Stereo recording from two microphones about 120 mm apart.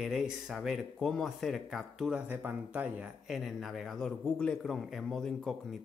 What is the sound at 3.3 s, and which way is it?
Speech, centre (ahead or behind).